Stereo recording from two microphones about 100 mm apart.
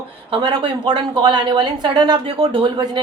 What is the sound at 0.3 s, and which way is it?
A woman's voice, 60° right (ahead or behind).